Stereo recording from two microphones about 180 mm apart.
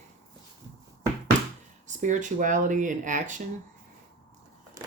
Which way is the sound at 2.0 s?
45° right (ahead or behind).